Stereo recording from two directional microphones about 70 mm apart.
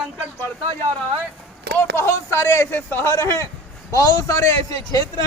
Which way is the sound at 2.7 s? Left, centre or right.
Left.